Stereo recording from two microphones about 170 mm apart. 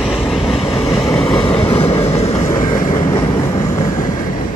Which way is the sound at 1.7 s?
35° left (ahead or behind).